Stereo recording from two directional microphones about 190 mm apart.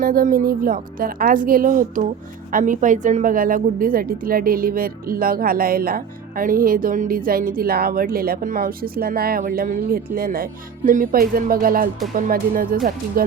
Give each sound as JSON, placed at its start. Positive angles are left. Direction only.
{"t": 0.0, "sound": "a woman's voice", "side_deg": -45}